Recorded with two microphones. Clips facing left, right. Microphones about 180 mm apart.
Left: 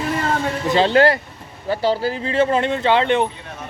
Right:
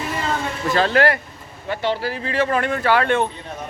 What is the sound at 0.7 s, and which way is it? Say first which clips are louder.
Speech: left 3 dB; 25° left (ahead or behind).